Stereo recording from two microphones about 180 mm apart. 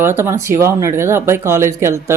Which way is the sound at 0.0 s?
15° right (ahead or behind).